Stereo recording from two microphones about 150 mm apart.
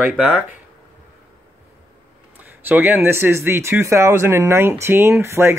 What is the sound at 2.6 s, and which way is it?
Speech, 10° right (ahead or behind).